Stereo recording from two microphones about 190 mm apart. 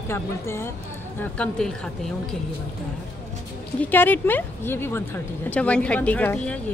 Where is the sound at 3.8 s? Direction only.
10° left (ahead or behind).